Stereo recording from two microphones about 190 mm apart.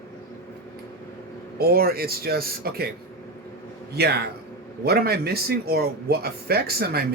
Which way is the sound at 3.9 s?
60° right (ahead or behind).